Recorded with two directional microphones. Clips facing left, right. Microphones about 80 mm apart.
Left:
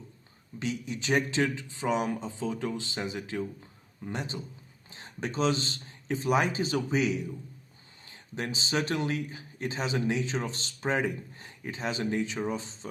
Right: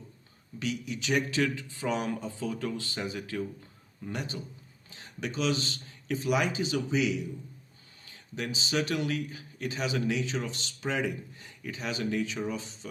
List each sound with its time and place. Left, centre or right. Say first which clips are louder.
0.6 s a man's voice: even; left
8.0 s a man's voice: left 1 dB; left